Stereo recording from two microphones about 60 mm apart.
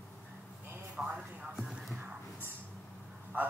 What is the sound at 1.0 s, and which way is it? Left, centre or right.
Speech, centre.